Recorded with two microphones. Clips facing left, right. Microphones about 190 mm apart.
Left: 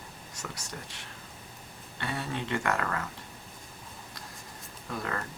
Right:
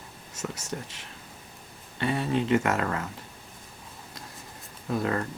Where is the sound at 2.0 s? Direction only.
25° right (ahead or behind).